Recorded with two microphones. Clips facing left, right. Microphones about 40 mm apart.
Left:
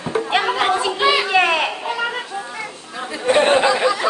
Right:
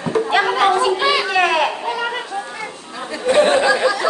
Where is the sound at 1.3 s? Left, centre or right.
Centre.